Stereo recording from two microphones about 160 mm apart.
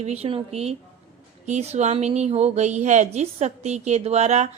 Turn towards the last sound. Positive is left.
turn(degrees=-45)  # may be behind; listen again after turning